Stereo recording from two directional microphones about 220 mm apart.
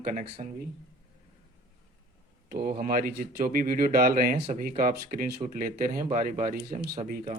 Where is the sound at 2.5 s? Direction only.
40° right (ahead or behind).